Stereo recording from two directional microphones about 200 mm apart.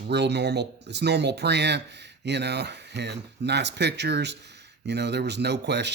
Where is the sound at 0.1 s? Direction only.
60° right (ahead or behind).